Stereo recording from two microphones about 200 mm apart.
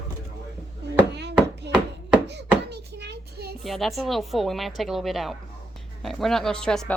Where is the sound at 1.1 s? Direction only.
55° right (ahead or behind).